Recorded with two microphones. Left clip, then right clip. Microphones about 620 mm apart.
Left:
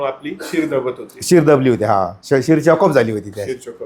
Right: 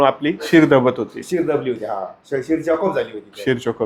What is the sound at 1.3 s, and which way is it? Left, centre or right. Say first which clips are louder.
Speech: left 9 dB; left.